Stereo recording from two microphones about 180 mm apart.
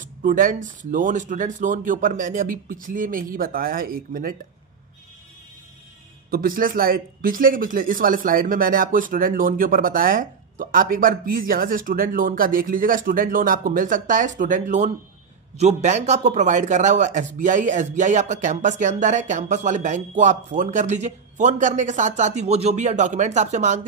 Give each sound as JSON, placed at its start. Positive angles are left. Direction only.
{"t": 0.0, "sound": "a man's voice", "side_deg": -45}
{"t": 6.3, "sound": "a man's voice", "side_deg": -50}